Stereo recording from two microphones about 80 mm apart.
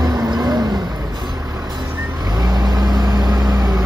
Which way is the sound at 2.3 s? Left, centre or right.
Right.